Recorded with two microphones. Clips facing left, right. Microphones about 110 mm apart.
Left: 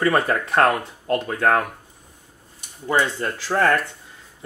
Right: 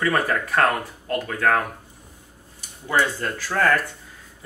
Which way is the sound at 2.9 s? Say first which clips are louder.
Left 1 dB; 20° left (ahead or behind).